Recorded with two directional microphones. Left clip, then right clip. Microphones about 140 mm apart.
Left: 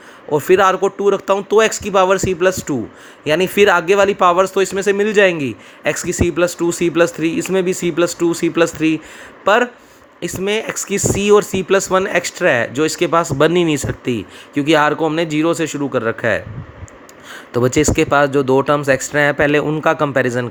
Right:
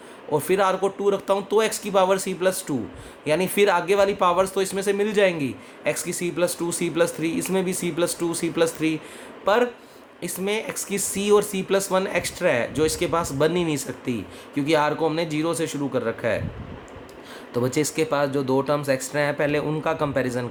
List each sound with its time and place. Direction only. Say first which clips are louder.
0.3 s speech: left 8 dB; 50° left (ahead or behind)
17.5 s speech: left 9 dB; 55° left (ahead or behind)